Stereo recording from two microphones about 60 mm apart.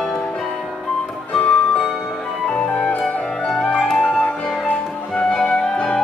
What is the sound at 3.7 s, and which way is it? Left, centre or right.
Music, centre.